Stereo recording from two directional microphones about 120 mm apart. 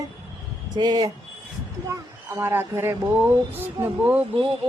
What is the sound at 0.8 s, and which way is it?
Speech, 35° right (ahead or behind).